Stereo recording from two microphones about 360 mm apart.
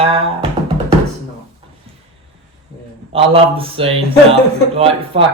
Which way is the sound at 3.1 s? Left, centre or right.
Centre.